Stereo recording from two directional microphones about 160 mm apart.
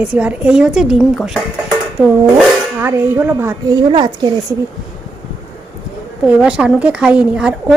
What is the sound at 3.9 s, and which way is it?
Speech, 25° right (ahead or behind).